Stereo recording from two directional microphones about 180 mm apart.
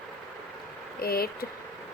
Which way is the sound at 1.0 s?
55° left (ahead or behind).